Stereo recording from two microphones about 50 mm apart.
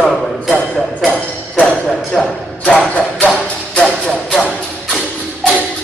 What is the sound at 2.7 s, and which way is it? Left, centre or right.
Music, left.